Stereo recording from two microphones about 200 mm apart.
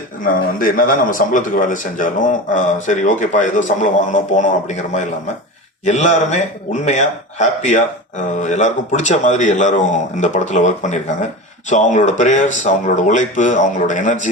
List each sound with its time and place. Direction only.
0.3 s a man's voice: 45° left (ahead or behind)